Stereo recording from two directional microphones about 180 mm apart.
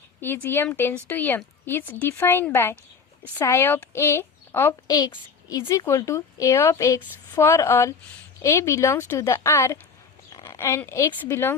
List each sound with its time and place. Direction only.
0.2 s a woman's voice: 10° left (ahead or behind)